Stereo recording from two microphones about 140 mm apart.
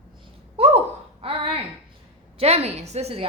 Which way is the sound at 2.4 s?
45° right (ahead or behind).